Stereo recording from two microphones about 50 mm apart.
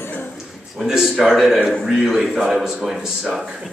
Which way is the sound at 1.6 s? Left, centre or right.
Centre.